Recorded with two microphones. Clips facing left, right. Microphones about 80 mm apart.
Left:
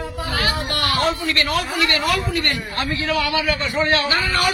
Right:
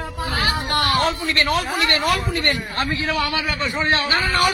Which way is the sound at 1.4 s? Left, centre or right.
Right.